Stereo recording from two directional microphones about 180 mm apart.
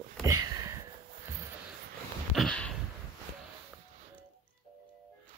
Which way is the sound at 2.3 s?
5° left (ahead or behind).